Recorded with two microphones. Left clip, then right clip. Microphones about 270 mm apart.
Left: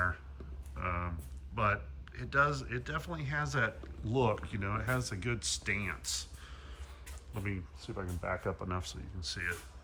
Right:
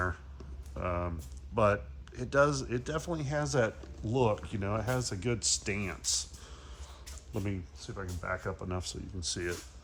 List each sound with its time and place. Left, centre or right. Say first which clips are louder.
0.8 s a sound: right 3 dB; centre
1.5 s a man's voice: right 5 dB; centre
7.4 s speech: right 1 dB; centre